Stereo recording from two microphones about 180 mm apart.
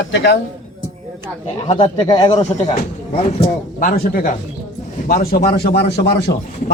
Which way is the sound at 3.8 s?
50° left (ahead or behind).